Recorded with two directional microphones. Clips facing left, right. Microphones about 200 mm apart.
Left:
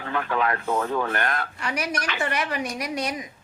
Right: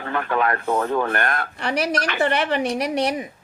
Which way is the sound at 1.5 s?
35° right (ahead or behind).